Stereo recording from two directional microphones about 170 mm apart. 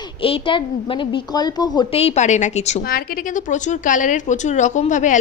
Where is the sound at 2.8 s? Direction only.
55° left (ahead or behind).